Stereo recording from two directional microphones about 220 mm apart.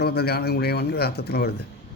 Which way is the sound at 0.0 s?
45° left (ahead or behind).